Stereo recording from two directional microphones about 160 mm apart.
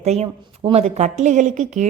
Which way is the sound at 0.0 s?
40° right (ahead or behind).